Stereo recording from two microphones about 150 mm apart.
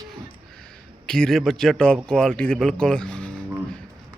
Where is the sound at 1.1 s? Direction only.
5° left (ahead or behind).